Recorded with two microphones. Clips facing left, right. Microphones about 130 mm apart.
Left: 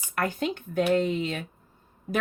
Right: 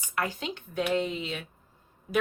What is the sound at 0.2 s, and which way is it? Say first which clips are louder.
Speech: left 4 dB; 50° left (ahead or behind).